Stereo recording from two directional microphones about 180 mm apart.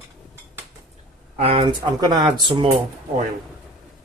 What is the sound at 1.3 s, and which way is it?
Speech, 35° right (ahead or behind).